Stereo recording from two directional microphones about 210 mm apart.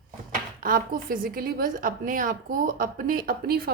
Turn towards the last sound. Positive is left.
turn(degrees=-45)  # may be behind; listen again after turning